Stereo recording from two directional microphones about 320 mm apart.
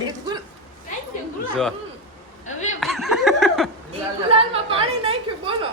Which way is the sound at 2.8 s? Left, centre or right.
Centre.